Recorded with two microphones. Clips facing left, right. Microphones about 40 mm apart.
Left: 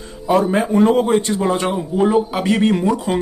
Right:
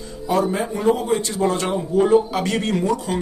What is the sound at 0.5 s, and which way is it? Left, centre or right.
Speech, left.